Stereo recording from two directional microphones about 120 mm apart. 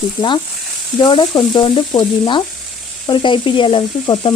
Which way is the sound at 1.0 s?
40° left (ahead or behind).